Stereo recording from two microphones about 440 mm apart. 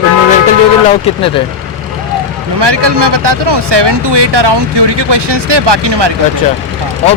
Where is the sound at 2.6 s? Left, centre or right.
Right.